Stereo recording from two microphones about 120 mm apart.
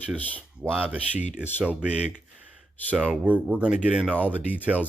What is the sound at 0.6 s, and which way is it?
Speech, 15° right (ahead or behind).